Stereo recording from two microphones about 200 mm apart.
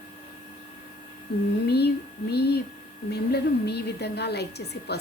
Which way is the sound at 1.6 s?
55° left (ahead or behind).